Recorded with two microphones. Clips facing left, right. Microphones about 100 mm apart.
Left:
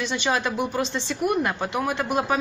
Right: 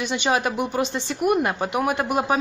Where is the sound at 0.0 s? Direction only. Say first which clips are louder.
Right 2 dB; 15° right (ahead or behind).